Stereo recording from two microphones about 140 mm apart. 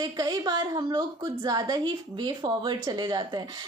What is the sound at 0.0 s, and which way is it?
A woman's voice, 30° right (ahead or behind).